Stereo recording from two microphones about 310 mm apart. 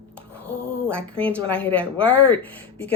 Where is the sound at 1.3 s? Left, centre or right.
Centre.